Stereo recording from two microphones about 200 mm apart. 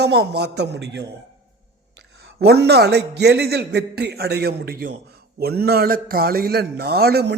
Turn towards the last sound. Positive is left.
turn(degrees=-55)  # may be behind; listen again after turning